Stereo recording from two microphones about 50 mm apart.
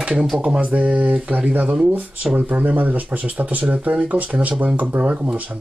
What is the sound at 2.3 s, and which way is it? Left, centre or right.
Speech, right.